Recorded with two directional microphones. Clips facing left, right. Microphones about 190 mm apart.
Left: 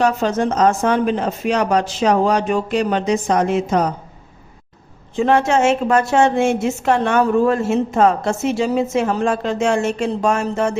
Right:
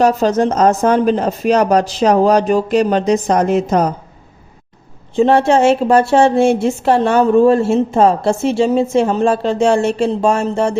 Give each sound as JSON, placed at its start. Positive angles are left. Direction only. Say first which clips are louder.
{"t": 0.0, "sound": "a woman's voice", "louder": "right 4 dB", "side_deg": -40}
{"t": 5.1, "sound": "a woman's voice", "louder": "right 4 dB", "side_deg": -30}